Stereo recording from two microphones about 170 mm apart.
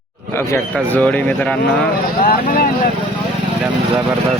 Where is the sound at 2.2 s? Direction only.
55° left (ahead or behind).